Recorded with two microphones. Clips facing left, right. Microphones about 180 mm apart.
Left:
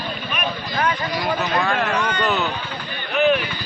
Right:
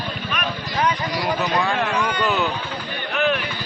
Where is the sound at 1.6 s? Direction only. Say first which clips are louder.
Even; 15° right (ahead or behind).